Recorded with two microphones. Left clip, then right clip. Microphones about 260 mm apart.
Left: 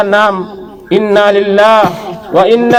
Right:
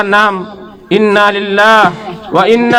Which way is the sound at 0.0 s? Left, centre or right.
Right.